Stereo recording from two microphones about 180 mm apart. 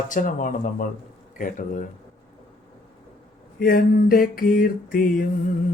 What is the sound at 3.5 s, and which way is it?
Mantra, 55° left (ahead or behind).